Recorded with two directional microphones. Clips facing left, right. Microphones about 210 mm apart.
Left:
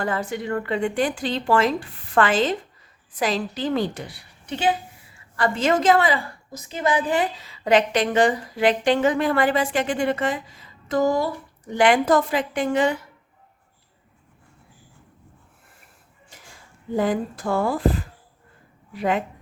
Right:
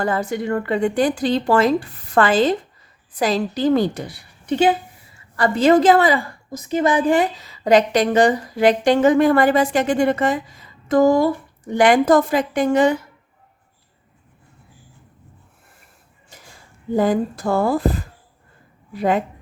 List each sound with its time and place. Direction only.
0.0 s a woman's voice: 40° right (ahead or behind)
6.7 s a woman's voice: 55° right (ahead or behind)
16.3 s a sound: 40° right (ahead or behind)
16.9 s a woman's voice: 40° right (ahead or behind)